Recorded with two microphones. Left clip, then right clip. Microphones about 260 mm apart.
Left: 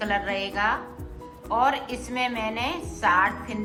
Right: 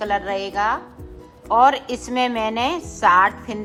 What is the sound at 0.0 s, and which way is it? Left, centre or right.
A woman's voice, centre.